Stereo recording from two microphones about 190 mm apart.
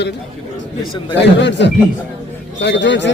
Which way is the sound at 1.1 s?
70° left (ahead or behind).